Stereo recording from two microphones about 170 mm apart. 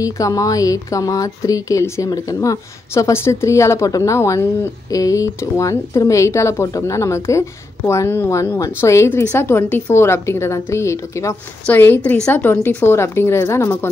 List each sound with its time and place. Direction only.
0.0 s speech: 20° left (ahead or behind)